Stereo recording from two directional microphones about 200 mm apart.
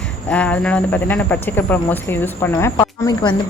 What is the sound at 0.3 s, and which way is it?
A woman's voice, 5° left (ahead or behind).